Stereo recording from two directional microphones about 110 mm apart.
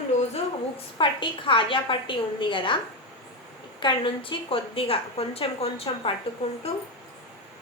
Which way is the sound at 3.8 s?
50° left (ahead or behind).